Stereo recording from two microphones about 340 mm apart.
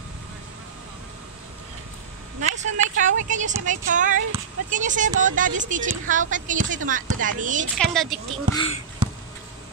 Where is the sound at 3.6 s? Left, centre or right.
Right.